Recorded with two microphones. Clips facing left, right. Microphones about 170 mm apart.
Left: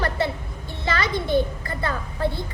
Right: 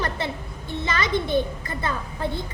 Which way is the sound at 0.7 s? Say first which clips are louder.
Right 1 dB; 20° right (ahead or behind).